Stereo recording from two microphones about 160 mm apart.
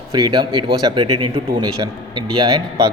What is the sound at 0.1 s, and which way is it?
A man's voice, 25° right (ahead or behind).